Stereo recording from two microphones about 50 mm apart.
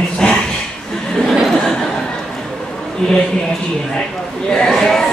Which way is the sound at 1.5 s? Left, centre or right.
Centre.